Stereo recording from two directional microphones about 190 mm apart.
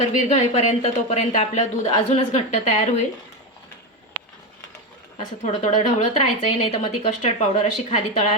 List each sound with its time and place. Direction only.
0.3 s speech: 35° left (ahead or behind)
5.1 s speech: 35° left (ahead or behind)